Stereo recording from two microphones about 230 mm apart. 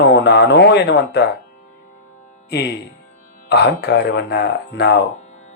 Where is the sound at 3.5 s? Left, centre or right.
Left.